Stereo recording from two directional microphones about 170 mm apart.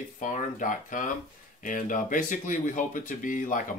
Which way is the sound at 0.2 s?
50° left (ahead or behind).